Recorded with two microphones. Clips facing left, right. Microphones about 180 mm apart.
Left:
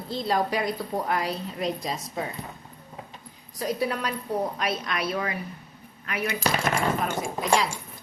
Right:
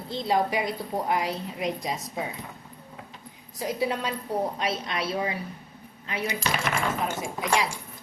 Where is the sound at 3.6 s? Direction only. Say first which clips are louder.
Even; 20° right (ahead or behind).